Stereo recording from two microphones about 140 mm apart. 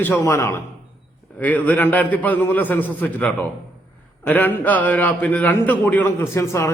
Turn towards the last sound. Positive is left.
turn(degrees=20)  # may be behind; listen again after turning